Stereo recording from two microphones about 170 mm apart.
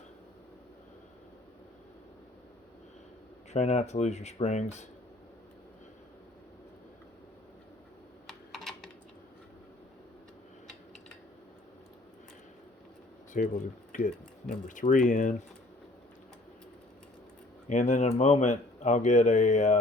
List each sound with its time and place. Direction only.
3.5 s speech: 40° left (ahead or behind)
8.5 s typing: 5° left (ahead or behind)
13.3 s speech: 50° left (ahead or behind)
17.7 s speech: 45° left (ahead or behind)